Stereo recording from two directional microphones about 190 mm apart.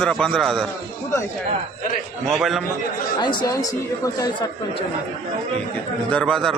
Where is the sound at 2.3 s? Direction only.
Centre (ahead or behind).